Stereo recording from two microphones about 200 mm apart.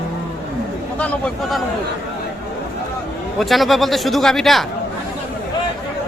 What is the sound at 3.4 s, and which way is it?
Speech, centre (ahead or behind).